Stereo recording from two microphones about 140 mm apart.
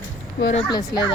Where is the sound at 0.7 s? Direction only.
25° left (ahead or behind).